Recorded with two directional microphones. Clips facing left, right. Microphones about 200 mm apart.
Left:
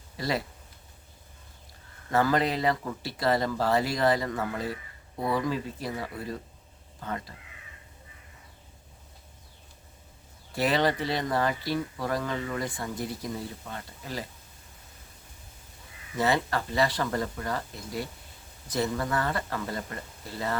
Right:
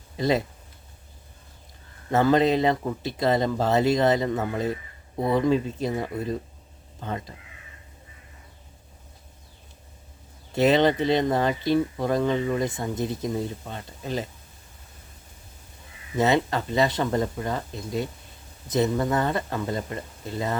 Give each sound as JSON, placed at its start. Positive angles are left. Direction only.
{"t": 0.2, "sound": "speech", "side_deg": -20}
{"t": 2.0, "sound": "speech", "side_deg": -25}
{"t": 10.5, "sound": "speech", "side_deg": -20}
{"t": 16.1, "sound": "speech", "side_deg": -20}